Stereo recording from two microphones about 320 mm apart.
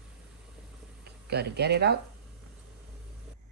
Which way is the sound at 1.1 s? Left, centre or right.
Right.